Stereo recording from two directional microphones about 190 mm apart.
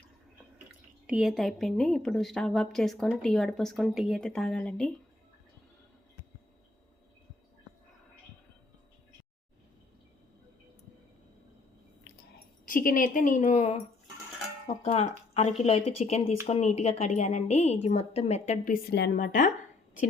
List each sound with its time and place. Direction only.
1.0 s a woman's voice: 5° right (ahead or behind)
12.6 s a woman's voice: 45° left (ahead or behind)
18.9 s a woman's voice: 60° left (ahead or behind); by 20.1 s 45° left (ahead or behind)